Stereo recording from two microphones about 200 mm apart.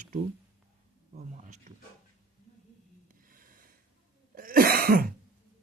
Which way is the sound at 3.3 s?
45° right (ahead or behind).